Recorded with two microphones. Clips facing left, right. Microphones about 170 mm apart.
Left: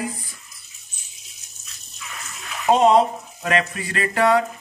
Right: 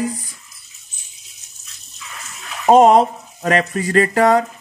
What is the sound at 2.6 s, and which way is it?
Speech, 45° right (ahead or behind).